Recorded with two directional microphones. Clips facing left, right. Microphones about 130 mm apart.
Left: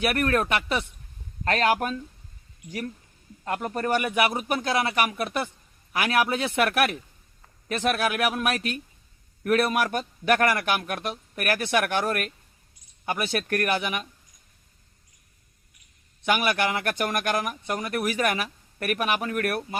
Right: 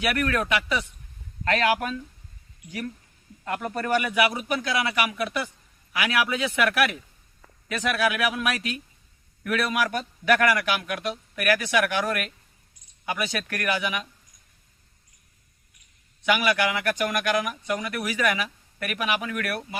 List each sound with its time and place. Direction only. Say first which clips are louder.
0.0 s a man's voice: left 2 dB; 45° left (ahead or behind)
3.4 s a man's voice: left 1 dB; 35° left (ahead or behind)
16.2 s a man's voice: right 1 dB; 45° left (ahead or behind)
17.2 s speech: right 1 dB; 45° left (ahead or behind)